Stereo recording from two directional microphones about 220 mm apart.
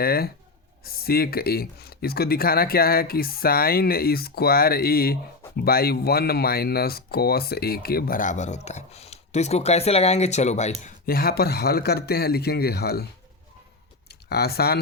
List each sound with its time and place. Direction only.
0.0 s speech: 45° left (ahead or behind)
10.8 s speech: 40° left (ahead or behind)
14.3 s speech: 45° left (ahead or behind)